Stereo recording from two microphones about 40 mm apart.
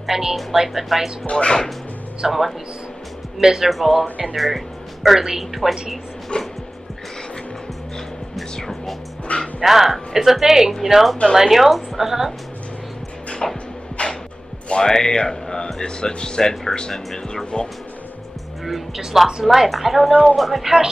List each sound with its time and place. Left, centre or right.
0.1 s speech: centre
1.2 s speech: left
2.2 s a woman's voice: centre
3.3 s speech: centre
3.7 s a woman's voice: centre
6.3 s speech: left
8.5 s music: centre
9.6 s a woman's voice: centre
13.4 s music: centre
14.0 s music: left
14.7 s speech: centre
18.9 s speech: centre
19.4 s a woman's voice: centre